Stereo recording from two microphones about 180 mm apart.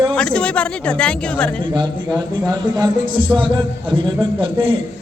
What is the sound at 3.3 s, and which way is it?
A man's voice, 25° right (ahead or behind).